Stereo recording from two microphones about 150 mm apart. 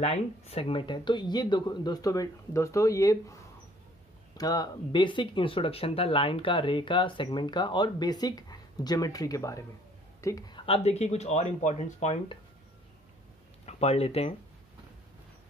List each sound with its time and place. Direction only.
0.0 s speech: 40° left (ahead or behind); by 3.3 s 20° left (ahead or behind)
4.4 s speech: 25° left (ahead or behind)
10.6 s speech: 40° left (ahead or behind)
13.7 s speech: 45° left (ahead or behind)